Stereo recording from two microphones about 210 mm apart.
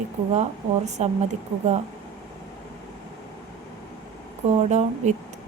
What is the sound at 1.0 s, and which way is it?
Speech, 30° right (ahead or behind).